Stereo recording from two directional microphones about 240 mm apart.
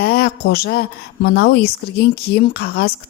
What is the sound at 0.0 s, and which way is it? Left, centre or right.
A woman's voice, left.